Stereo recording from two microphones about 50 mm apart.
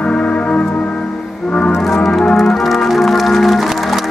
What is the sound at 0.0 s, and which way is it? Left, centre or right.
Music, left.